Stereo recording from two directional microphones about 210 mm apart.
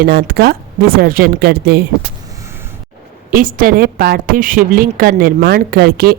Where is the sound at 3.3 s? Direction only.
40° right (ahead or behind).